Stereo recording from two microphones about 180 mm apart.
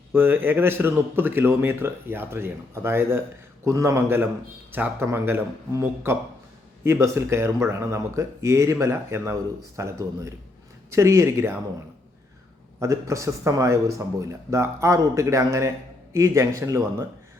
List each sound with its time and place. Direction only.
0.1 s speech: 10° right (ahead or behind)
12.8 s speech: 15° right (ahead or behind)